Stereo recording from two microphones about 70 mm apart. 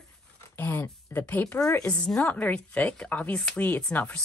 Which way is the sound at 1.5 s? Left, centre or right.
Left.